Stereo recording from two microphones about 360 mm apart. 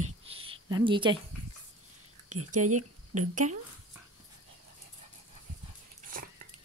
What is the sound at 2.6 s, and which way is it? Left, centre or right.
Speech, right.